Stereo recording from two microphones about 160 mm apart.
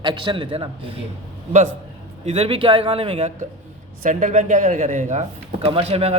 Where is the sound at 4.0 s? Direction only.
50° right (ahead or behind).